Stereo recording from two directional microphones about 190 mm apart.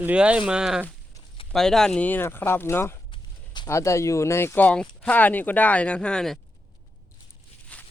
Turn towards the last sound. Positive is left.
turn(degrees=10)  # may be behind; listen again after turning